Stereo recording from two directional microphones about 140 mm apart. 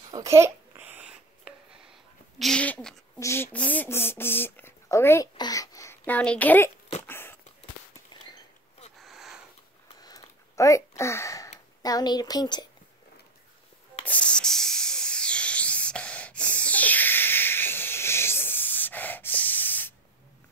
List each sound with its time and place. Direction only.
0.1 s babbling: 20° right (ahead or behind)
2.3 s speech: 5° left (ahead or behind)
3.2 s a child's voice: 20° left (ahead or behind)
6.0 s speech: 10° left (ahead or behind)
7.1 s a sound: 15° left (ahead or behind)
8.1 s rodents: 30° left (ahead or behind)
8.9 s sniff: centre (ahead or behind)
9.9 s a sound: 25° left (ahead or behind)
11.8 s speech: 30° left (ahead or behind)
14.0 s a sound: 10° left (ahead or behind)